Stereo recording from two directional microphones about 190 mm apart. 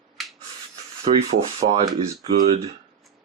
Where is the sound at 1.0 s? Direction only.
35° right (ahead or behind).